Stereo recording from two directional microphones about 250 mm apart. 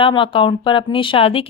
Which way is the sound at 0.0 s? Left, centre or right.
Centre.